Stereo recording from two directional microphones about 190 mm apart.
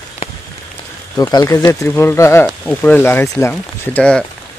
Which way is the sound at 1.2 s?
20° left (ahead or behind).